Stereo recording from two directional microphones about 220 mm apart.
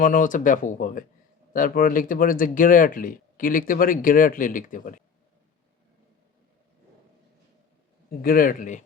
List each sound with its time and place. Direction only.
0.0 s speech: 35° left (ahead or behind)
8.2 s speech: 40° left (ahead or behind)